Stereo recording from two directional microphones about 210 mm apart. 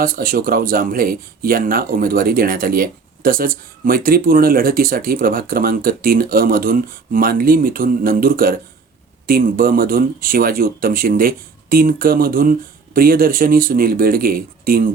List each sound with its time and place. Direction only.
0.0 s speech: 40° right (ahead or behind)